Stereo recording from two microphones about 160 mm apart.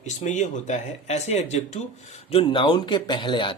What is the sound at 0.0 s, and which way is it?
Speech, 45° left (ahead or behind).